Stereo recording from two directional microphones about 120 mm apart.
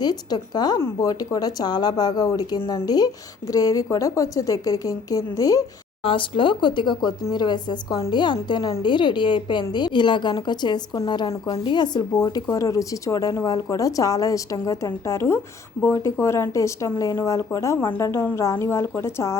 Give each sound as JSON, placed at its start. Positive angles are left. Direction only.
{"t": 0.0, "sound": "a woman's voice", "side_deg": 35}
{"t": 6.0, "sound": "a woman's voice", "side_deg": 45}